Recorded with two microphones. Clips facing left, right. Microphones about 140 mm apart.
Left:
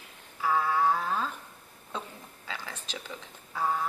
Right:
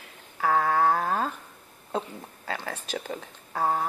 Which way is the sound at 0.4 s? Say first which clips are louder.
Right 3 dB; 60° right (ahead or behind).